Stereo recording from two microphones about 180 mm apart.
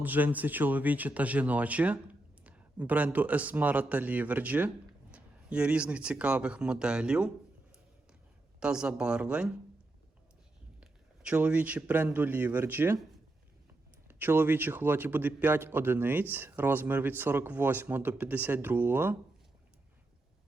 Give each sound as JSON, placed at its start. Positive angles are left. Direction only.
{"t": 0.0, "sound": "a man's voice", "side_deg": -10}
{"t": 8.6, "sound": "speech", "side_deg": -5}
{"t": 10.8, "sound": "a man's voice", "side_deg": -5}
{"t": 14.1, "sound": "a man's voice", "side_deg": -10}